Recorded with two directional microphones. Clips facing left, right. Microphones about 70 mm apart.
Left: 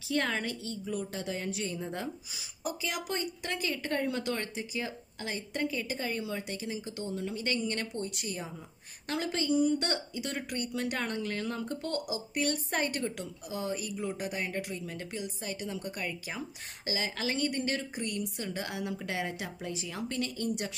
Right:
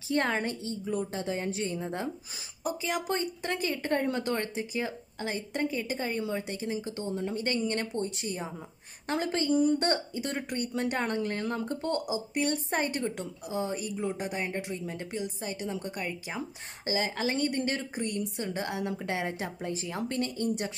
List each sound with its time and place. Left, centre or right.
0.1 s a woman's voice: right